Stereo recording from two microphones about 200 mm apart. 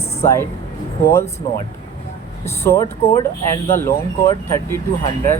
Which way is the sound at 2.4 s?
10° left (ahead or behind).